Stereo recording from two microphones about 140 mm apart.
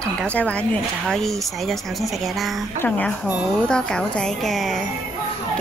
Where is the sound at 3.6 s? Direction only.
5° left (ahead or behind).